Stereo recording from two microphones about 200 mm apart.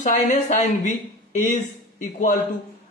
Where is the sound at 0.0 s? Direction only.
40° left (ahead or behind).